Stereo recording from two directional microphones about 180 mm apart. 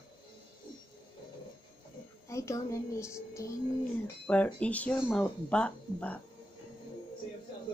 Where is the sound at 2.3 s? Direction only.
15° left (ahead or behind).